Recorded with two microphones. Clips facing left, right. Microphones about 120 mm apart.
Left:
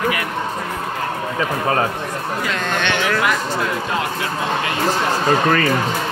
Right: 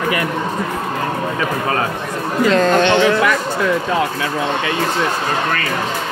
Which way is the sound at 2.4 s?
35° right (ahead or behind).